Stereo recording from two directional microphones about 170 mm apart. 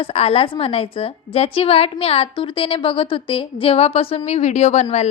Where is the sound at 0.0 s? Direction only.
35° left (ahead or behind).